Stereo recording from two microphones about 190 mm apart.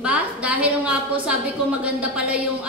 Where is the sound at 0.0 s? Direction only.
5° right (ahead or behind).